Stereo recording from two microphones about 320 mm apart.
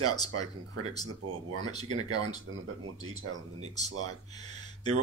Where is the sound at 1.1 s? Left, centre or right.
Right.